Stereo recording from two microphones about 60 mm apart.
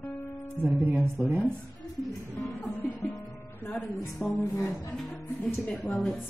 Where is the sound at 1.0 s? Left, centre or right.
Right.